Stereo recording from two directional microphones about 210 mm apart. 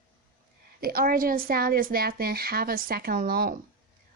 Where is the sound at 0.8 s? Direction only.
45° right (ahead or behind).